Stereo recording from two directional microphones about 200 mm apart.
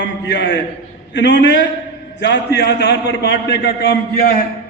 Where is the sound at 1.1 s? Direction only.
60° left (ahead or behind).